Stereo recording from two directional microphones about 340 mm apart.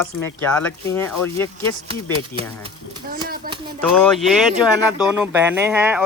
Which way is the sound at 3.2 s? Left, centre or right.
Right.